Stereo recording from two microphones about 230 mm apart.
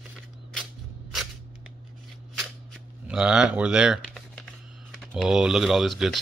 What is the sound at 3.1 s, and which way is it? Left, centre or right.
Speech, centre.